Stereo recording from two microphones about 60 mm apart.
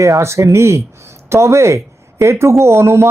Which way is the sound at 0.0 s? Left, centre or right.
Right.